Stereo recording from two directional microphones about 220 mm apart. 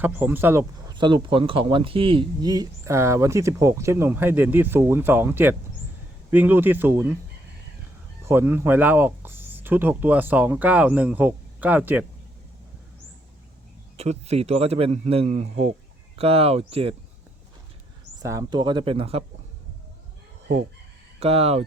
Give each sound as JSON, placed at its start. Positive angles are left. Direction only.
{"t": 0.0, "sound": "speech", "side_deg": -10}
{"t": 8.2, "sound": "speech", "side_deg": -10}
{"t": 13.9, "sound": "a man's voice", "side_deg": -30}
{"t": 18.2, "sound": "a man's voice", "side_deg": -15}
{"t": 21.2, "sound": "a man's voice", "side_deg": -25}